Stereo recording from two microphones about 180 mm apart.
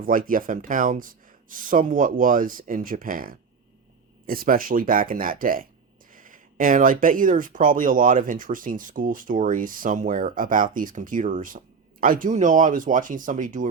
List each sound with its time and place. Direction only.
0.0 s speech: 50° right (ahead or behind)